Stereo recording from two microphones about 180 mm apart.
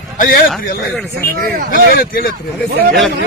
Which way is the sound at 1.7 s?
55° left (ahead or behind).